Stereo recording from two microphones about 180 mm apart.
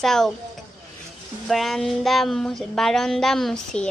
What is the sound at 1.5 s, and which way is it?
Speech, centre (ahead or behind).